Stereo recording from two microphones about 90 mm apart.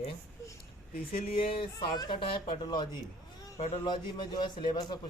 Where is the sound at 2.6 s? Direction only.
50° left (ahead or behind).